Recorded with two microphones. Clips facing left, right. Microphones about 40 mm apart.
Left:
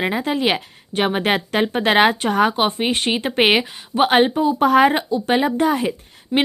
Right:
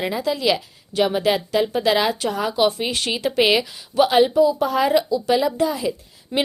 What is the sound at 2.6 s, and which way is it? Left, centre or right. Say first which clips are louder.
A woman's voice: left 1 dB; left.